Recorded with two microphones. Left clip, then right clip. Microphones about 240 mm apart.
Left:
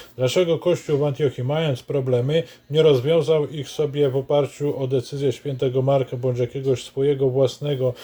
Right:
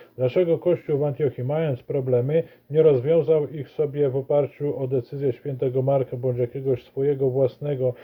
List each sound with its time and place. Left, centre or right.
0.2 s speech: left